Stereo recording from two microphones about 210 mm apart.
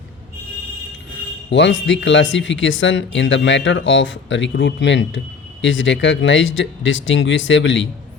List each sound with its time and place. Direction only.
1.5 s speech: 60° left (ahead or behind)